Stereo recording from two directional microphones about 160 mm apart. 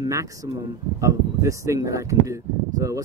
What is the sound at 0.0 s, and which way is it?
Speech, 20° right (ahead or behind).